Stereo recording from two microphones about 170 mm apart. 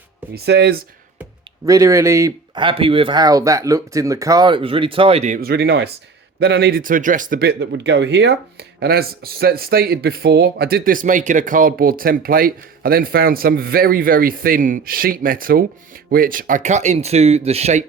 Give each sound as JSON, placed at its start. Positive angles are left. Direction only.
{"t": 0.3, "sound": "speech", "side_deg": -80}
{"t": 1.6, "sound": "speech", "side_deg": -20}
{"t": 2.6, "sound": "speech", "side_deg": -30}
{"t": 5.4, "sound": "speech", "side_deg": -65}